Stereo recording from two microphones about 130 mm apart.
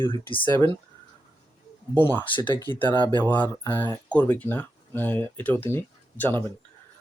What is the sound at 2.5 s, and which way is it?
Speech, 35° right (ahead or behind).